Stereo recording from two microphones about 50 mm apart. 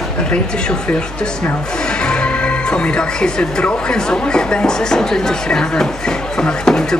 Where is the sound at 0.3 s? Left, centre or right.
Centre.